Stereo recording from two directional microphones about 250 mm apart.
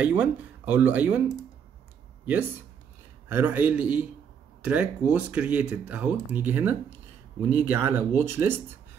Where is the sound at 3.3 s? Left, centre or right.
Centre.